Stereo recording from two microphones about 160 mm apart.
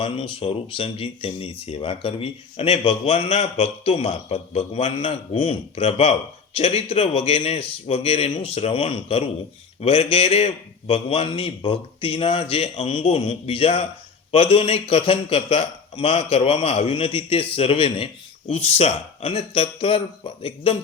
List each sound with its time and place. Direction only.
0.0 s speech: 35° left (ahead or behind)